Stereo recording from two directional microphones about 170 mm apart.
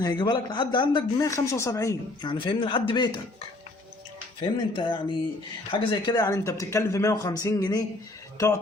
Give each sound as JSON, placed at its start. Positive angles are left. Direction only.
{"t": 0.0, "sound": "speech", "side_deg": 25}
{"t": 2.2, "sound": "speech", "side_deg": 30}
{"t": 4.4, "sound": "speech", "side_deg": 30}